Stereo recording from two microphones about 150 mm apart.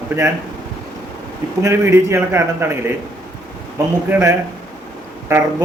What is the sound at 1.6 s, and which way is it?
A man's voice, 15° right (ahead or behind).